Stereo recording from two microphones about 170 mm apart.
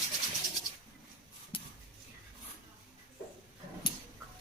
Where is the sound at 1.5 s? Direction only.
30° left (ahead or behind).